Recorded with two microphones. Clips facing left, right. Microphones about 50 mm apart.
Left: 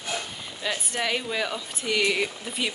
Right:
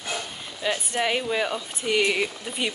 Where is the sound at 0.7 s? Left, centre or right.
Centre.